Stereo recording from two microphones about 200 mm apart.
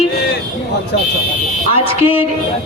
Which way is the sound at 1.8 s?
30° left (ahead or behind).